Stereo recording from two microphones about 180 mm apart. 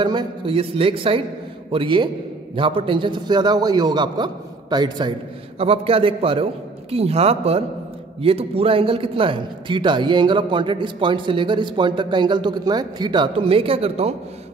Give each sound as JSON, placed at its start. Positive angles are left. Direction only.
{"t": 0.0, "sound": "a man's voice", "side_deg": -25}